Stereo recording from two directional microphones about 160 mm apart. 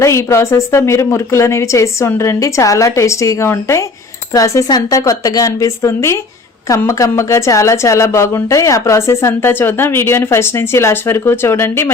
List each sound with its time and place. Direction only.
0.0 s a woman's voice: 15° left (ahead or behind)